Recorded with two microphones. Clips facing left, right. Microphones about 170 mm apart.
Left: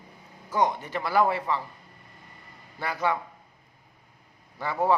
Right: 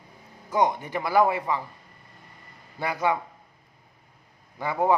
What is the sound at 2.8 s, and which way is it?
Speech, 15° right (ahead or behind).